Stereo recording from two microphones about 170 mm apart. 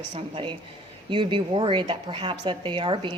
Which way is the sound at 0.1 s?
30° right (ahead or behind).